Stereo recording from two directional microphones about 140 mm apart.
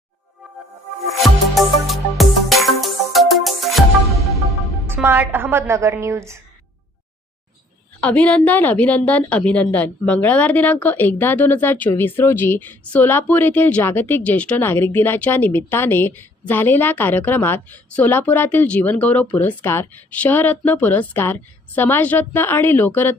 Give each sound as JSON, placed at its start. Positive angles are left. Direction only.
{"t": 1.2, "sound": "music", "side_deg": 0}
{"t": 5.0, "sound": "a woman's voice", "side_deg": -15}
{"t": 8.0, "sound": "a woman's voice", "side_deg": 10}